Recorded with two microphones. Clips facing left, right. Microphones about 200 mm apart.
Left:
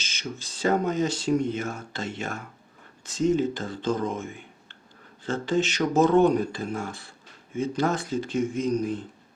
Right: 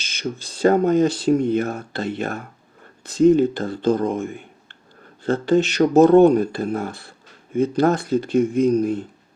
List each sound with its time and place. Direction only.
0.0 s speech: 60° right (ahead or behind)